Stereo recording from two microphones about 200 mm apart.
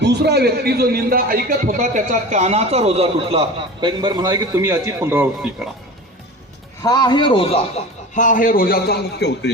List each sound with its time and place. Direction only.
0.0 s a man's voice: 55° right (ahead or behind); by 5.5 s 10° right (ahead or behind)
6.8 s a man's voice: 20° left (ahead or behind)
8.1 s a man's voice: 40° left (ahead or behind); by 9.5 s 55° left (ahead or behind)